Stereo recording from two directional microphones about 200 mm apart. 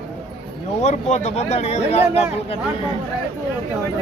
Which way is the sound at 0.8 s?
35° left (ahead or behind).